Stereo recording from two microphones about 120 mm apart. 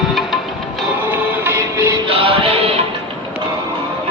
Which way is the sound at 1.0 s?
15° right (ahead or behind).